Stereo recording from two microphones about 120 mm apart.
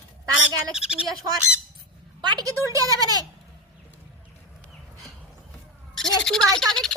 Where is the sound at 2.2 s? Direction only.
35° right (ahead or behind).